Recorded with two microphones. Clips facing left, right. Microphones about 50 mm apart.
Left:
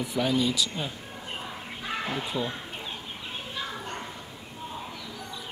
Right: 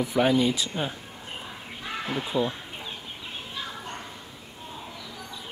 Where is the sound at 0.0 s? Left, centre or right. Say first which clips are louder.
Right 4 dB; right.